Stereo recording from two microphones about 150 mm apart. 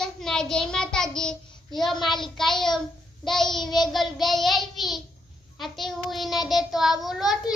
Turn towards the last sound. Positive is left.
turn(degrees=0)  # may be behind; listen again after turning